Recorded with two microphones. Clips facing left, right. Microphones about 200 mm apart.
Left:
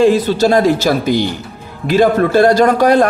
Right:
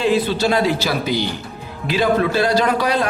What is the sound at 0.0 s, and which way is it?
Speech, 45° left (ahead or behind).